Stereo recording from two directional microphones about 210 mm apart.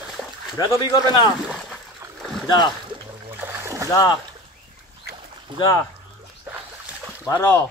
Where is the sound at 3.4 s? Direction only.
10° right (ahead or behind).